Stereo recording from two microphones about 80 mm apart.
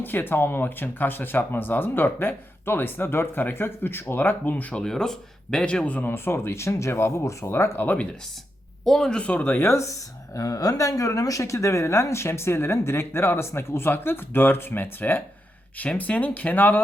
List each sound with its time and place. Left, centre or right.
0.0 s speech: left
4.8 s speech: centre
6.1 s speech: left
8.8 s speech: centre; by 16.8 s left